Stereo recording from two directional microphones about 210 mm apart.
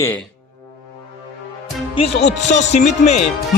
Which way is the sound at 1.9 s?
30° left (ahead or behind).